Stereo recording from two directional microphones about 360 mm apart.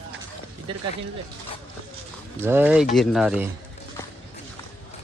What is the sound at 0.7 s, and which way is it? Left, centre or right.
Speech, centre.